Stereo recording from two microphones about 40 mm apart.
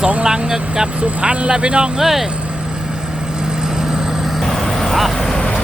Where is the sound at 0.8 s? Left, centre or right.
Centre.